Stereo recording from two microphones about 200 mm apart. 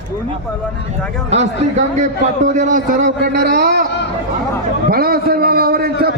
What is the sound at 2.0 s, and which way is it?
A man's voice, 35° right (ahead or behind).